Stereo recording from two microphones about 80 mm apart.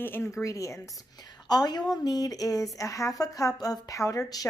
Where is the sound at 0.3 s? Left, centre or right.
Left.